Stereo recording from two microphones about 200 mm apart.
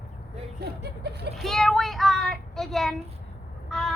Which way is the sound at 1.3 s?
Centre (ahead or behind).